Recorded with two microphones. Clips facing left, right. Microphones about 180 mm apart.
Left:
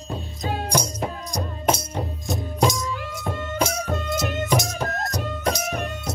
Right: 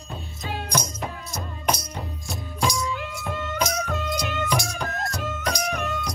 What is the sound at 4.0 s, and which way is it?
Music, 45° left (ahead or behind).